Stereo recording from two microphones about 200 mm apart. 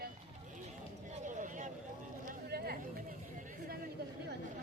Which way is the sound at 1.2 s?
40° right (ahead or behind).